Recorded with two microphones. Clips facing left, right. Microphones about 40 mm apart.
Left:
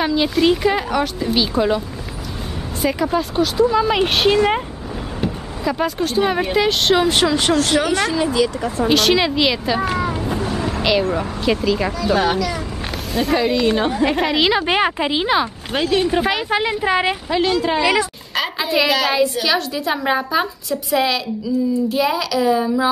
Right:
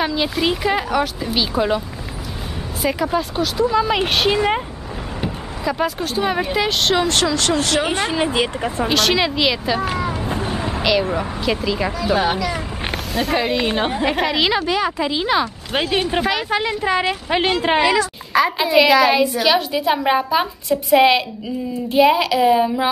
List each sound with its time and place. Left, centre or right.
0.0 s speech: centre
2.8 s speech: centre
7.8 s a woman's voice: right
8.8 s speech: centre
10.4 s vehicle: right
10.8 s a woman's voice: centre
13.7 s speech: centre
14.0 s speech: centre
15.0 s speech: left
15.7 s speech: centre
16.2 s speech: centre
17.3 s a woman's voice: right
18.6 s a woman's voice: centre
20.9 s speech: right